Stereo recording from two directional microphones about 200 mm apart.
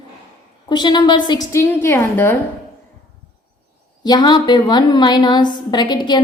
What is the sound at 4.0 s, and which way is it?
A woman's voice, 20° left (ahead or behind).